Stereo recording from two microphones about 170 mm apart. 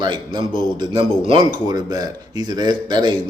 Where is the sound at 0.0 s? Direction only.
25° right (ahead or behind).